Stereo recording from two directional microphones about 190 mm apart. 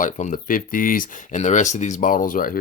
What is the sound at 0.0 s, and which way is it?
Speech, 40° left (ahead or behind).